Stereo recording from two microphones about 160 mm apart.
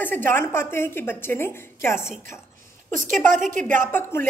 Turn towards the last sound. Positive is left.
turn(degrees=15)  # may be behind; listen again after turning